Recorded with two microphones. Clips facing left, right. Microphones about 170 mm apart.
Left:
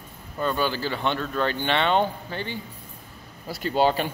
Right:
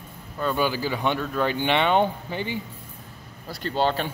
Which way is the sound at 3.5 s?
10° left (ahead or behind).